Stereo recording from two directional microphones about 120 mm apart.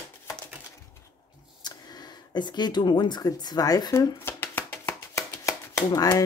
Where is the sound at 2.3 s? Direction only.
35° left (ahead or behind).